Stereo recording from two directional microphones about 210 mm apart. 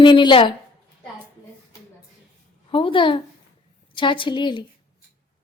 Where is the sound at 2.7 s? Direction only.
25° left (ahead or behind).